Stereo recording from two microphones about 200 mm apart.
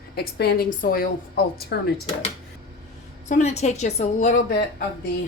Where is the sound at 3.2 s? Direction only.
35° left (ahead or behind).